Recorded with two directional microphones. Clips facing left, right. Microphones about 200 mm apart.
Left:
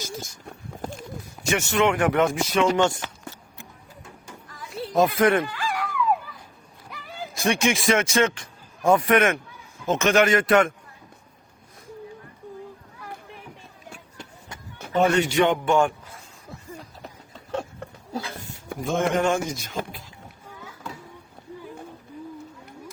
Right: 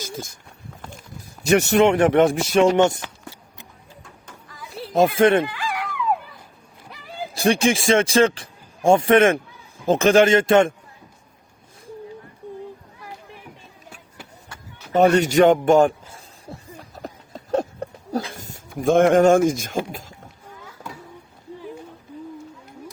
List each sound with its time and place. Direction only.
0.0 s speech: 55° right (ahead or behind)
1.4 s a sound: 10° left (ahead or behind)
1.7 s speech: 30° right (ahead or behind)
2.7 s speech: 20° right (ahead or behind)
4.4 s music: centre (ahead or behind)
4.7 s a child's voice: 30° right (ahead or behind)
5.5 s a sound: 15° right (ahead or behind)
7.3 s speech: 30° right (ahead or behind)
14.9 s speech: 40° right (ahead or behind)
16.0 s a sound: 30° right (ahead or behind)
18.8 s speech: 55° right (ahead or behind)